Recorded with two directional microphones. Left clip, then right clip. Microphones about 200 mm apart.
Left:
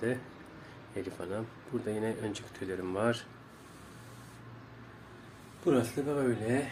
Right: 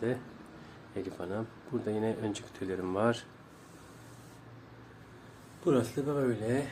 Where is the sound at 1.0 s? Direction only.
15° right (ahead or behind).